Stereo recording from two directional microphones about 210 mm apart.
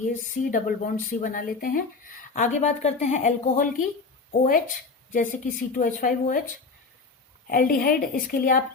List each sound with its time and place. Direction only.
0.5 s speech: 40° left (ahead or behind)
7.4 s a woman's voice: 45° left (ahead or behind)